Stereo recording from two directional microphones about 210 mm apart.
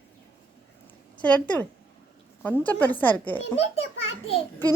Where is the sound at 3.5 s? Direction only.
30° left (ahead or behind).